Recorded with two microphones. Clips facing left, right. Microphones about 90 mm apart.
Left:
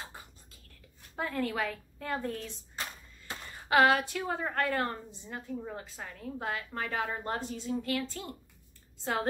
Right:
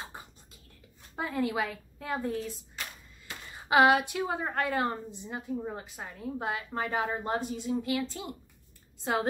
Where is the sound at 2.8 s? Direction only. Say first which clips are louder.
Left 3 dB; 35° left (ahead or behind).